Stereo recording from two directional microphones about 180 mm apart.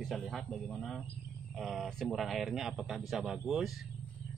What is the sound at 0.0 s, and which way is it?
Speech, centre (ahead or behind).